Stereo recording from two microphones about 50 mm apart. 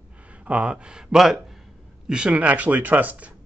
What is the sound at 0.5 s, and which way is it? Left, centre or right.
Speech, right.